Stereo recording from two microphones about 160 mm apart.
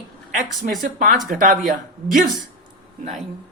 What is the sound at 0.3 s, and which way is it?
A woman's voice, 55° right (ahead or behind).